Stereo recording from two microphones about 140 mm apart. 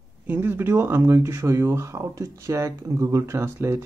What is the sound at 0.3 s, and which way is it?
Speech, 15° right (ahead or behind).